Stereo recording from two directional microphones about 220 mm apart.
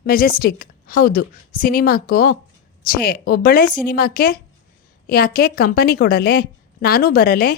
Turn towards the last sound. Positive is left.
turn(degrees=45)  # may be behind; listen again after turning